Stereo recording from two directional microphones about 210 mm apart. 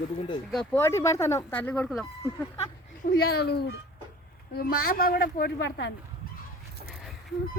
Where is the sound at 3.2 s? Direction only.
50° left (ahead or behind).